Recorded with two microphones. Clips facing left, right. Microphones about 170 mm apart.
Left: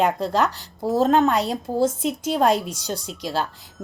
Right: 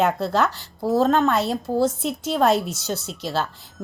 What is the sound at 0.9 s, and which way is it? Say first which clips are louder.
Speech: left 1 dB; 20° left (ahead or behind).